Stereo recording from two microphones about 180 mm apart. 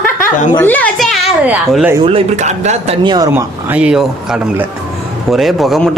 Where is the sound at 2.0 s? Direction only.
35° right (ahead or behind).